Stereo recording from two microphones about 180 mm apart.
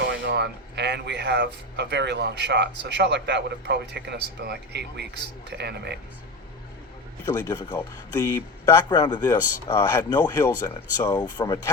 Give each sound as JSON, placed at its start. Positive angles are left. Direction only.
{"t": 0.0, "sound": "speech", "side_deg": -75}
{"t": 7.3, "sound": "speech", "side_deg": 20}